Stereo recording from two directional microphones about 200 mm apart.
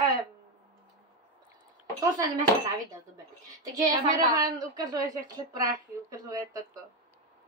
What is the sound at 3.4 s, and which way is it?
A woman's voice, 20° right (ahead or behind).